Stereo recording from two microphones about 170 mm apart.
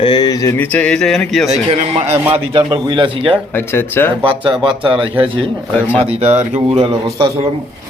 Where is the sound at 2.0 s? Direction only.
10° right (ahead or behind).